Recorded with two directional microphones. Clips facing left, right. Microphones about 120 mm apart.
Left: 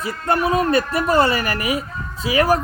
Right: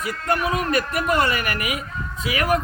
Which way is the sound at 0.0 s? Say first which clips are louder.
Left 3 dB; 30° left (ahead or behind).